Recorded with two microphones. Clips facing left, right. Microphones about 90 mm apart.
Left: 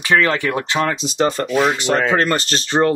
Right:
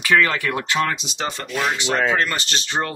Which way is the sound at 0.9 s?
35° left (ahead or behind).